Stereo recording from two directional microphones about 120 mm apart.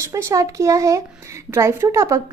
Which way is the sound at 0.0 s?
25° right (ahead or behind).